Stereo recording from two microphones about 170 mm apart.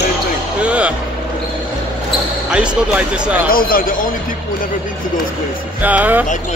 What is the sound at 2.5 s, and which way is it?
Speech, 5° right (ahead or behind).